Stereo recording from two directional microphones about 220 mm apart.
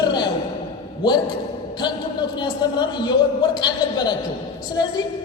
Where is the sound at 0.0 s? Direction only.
20° left (ahead or behind).